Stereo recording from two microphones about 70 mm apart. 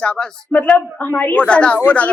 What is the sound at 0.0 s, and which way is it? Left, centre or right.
Speech, centre.